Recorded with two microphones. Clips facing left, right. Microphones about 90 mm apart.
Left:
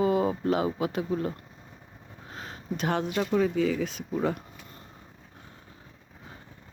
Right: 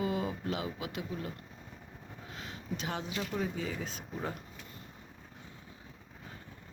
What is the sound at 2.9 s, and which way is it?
Speech, 70° left (ahead or behind).